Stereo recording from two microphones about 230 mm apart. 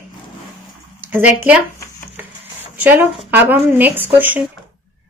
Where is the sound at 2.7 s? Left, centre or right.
Centre.